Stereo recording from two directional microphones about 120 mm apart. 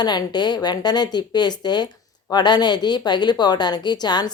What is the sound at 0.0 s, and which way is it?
A woman's voice, 35° left (ahead or behind).